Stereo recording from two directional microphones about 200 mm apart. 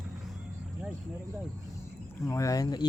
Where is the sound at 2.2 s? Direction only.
15° left (ahead or behind).